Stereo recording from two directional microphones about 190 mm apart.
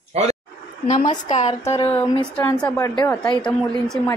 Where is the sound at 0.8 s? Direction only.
40° left (ahead or behind).